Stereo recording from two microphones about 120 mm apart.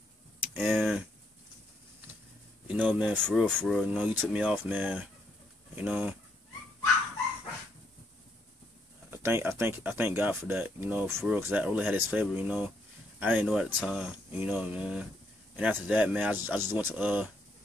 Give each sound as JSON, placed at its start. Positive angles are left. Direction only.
{"t": 0.6, "sound": "speech", "side_deg": 0}
{"t": 2.7, "sound": "speech", "side_deg": -10}
{"t": 3.3, "sound": "speech", "side_deg": 5}
{"t": 3.8, "sound": "speech", "side_deg": -10}
{"t": 9.1, "sound": "speech", "side_deg": -20}